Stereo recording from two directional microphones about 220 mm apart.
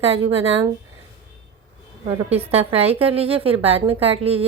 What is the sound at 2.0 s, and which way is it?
A woman's voice, 25° right (ahead or behind).